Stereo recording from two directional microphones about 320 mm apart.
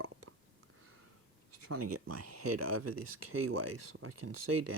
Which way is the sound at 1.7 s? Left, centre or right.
Right.